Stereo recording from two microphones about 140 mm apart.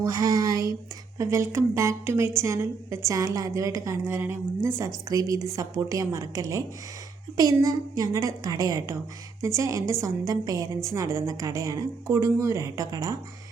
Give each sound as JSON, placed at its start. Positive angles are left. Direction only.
{"t": 0.0, "sound": "a woman's voice", "side_deg": -25}